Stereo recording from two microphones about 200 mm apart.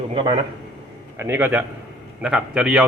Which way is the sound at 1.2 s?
10° right (ahead or behind).